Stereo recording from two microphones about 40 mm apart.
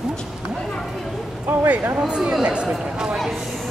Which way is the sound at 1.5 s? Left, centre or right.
Right.